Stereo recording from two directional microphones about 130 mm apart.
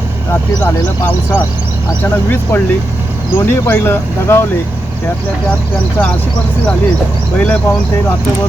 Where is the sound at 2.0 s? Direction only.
15° left (ahead or behind).